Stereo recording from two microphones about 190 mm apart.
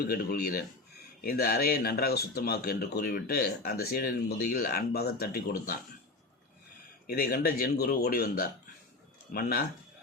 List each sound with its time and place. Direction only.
0.0 s speech: 55° left (ahead or behind)
7.1 s speech: 50° left (ahead or behind)